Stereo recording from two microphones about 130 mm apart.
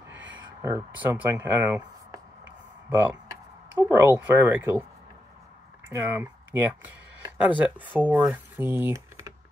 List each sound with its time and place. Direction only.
0.6 s speech: 20° right (ahead or behind)
2.9 s speech: 15° right (ahead or behind)
5.9 s speech: 15° right (ahead or behind)